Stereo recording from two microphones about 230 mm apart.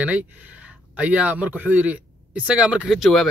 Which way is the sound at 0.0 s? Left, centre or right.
Centre.